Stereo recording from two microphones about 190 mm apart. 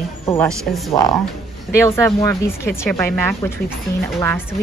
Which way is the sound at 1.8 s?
15° left (ahead or behind).